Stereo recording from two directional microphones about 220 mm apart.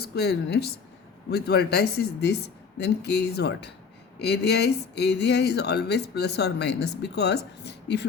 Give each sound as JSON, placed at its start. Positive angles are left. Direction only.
{"t": 0.0, "sound": "speech", "side_deg": 50}